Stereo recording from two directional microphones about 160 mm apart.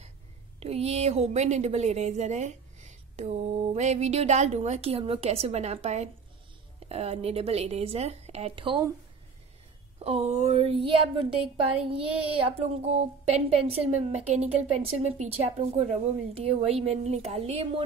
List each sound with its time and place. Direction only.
0.6 s a woman's voice: 40° right (ahead or behind)
9.9 s speech: 40° right (ahead or behind)